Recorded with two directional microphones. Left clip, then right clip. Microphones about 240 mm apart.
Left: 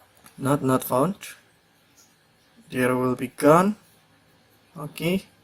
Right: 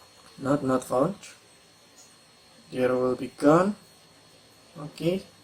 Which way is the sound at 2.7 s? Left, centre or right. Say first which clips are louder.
Left 1 dB; left.